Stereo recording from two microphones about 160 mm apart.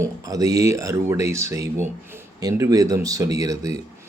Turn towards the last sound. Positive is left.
turn(degrees=-20)  # may be behind; listen again after turning